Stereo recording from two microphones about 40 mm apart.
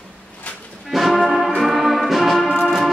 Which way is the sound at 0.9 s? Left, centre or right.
Centre.